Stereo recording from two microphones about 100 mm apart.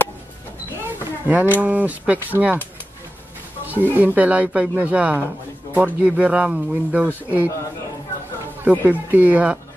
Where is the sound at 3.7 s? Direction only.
15° right (ahead or behind).